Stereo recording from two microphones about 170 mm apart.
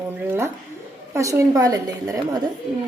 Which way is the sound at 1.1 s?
15° right (ahead or behind).